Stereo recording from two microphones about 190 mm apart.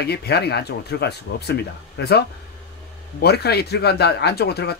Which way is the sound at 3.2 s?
60° left (ahead or behind).